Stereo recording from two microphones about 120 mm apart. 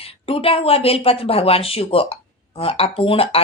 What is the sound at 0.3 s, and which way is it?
Speech, 50° left (ahead or behind).